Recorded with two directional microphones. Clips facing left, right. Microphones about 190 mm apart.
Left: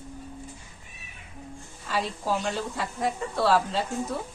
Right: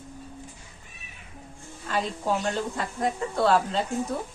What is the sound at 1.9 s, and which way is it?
Speech, centre (ahead or behind).